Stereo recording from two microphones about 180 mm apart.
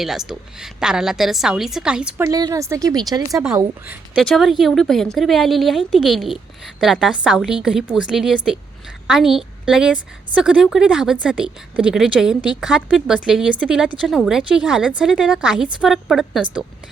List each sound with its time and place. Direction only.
0.0 s a woman's voice: centre (ahead or behind)
4.2 s a woman's voice: centre (ahead or behind)